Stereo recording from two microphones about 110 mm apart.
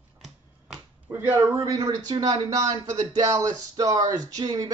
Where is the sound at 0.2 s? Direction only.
5° right (ahead or behind).